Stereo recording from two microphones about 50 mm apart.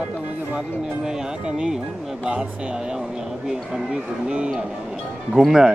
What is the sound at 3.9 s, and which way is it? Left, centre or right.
Speech, centre.